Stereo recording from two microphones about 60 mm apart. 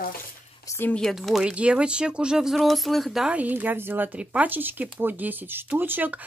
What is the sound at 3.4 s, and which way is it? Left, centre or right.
Speech, right.